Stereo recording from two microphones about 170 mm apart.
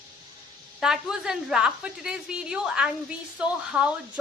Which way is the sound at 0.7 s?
5° right (ahead or behind).